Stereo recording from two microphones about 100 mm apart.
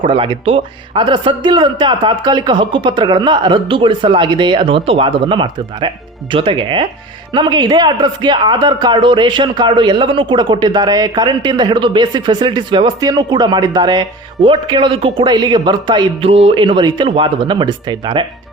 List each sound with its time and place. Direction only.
0.0 s speech: 55° right (ahead or behind)